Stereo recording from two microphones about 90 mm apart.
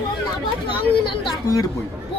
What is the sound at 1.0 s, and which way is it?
Speech, 65° left (ahead or behind).